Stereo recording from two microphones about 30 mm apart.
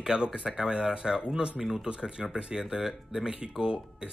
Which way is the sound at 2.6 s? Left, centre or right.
Centre.